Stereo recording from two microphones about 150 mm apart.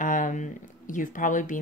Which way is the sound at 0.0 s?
60° left (ahead or behind).